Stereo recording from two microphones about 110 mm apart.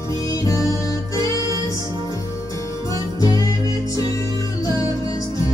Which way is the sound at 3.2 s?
30° left (ahead or behind).